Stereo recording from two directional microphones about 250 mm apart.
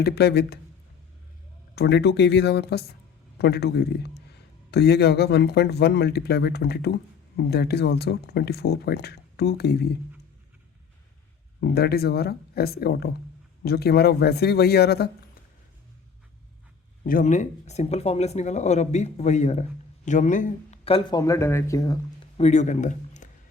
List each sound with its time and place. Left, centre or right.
0.0 s speech: left
1.7 s speech: left
11.6 s speech: left
17.0 s speech: left; by 21.9 s centre
22.4 s speech: left